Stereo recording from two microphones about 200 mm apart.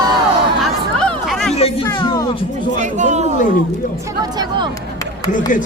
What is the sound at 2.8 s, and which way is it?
Speech, 35° right (ahead or behind).